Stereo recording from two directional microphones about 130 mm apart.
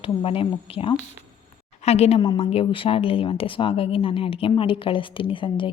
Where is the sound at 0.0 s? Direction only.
45° left (ahead or behind).